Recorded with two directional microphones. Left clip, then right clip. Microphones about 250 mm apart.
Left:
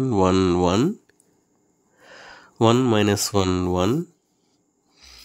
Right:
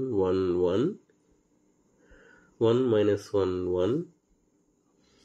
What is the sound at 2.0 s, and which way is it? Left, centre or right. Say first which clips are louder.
Speech: left 13 dB; left.